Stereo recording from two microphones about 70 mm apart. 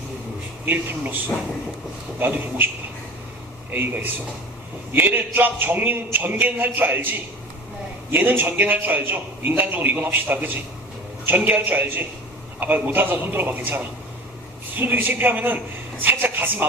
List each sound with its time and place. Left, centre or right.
0.6 s a man's voice: right
3.7 s a man's voice: right